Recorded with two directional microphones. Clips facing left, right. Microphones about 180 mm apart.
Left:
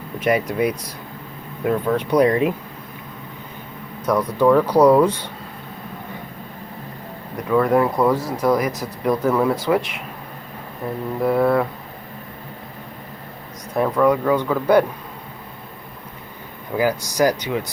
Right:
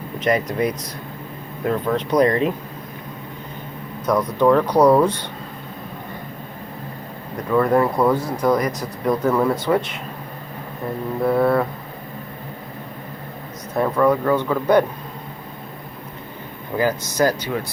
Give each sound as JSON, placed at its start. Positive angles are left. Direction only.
{"t": 0.2, "sound": "speech", "side_deg": 10}
{"t": 4.0, "sound": "speech", "side_deg": 10}
{"t": 4.8, "sound": "speech", "side_deg": -10}
{"t": 7.5, "sound": "speech", "side_deg": 0}
{"t": 11.2, "sound": "speech", "side_deg": 0}
{"t": 13.7, "sound": "speech", "side_deg": 0}
{"t": 16.7, "sound": "speech", "side_deg": 10}